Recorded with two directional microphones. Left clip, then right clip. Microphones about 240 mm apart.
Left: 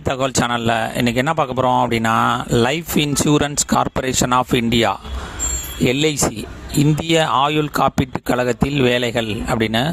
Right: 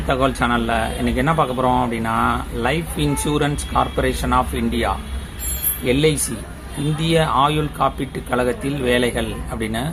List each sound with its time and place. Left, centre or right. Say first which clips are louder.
0.1 s speech: right 1 dB; left